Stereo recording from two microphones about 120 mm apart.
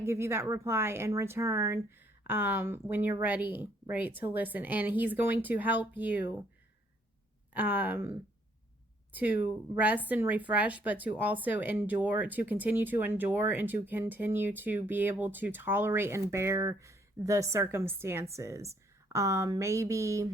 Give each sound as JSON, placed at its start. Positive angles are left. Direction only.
{"t": 0.0, "sound": "speech", "side_deg": -20}
{"t": 7.5, "sound": "speech", "side_deg": -15}
{"t": 9.1, "sound": "speech", "side_deg": -15}